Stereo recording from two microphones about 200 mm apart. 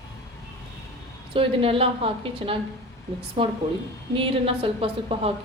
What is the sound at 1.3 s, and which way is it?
Speech, 25° right (ahead or behind).